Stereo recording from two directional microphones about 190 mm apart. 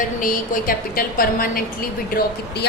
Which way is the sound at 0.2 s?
45° left (ahead or behind).